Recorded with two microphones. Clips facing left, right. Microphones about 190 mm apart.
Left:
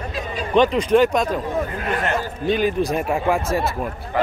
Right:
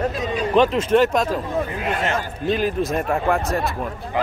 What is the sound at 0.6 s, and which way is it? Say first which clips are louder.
Speech: left 1 dB; centre (ahead or behind).